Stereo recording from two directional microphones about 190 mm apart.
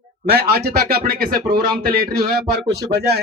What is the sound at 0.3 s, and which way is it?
Speech, 55° right (ahead or behind).